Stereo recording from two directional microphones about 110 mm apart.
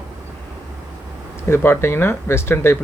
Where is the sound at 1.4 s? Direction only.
25° left (ahead or behind).